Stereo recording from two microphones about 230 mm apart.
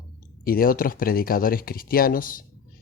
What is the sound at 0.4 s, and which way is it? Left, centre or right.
Speech, left.